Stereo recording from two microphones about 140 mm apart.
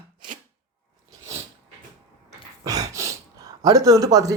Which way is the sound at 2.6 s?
25° right (ahead or behind).